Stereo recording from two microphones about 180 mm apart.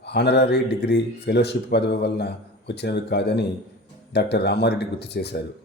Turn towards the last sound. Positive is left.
turn(degrees=70)  # may be behind; listen again after turning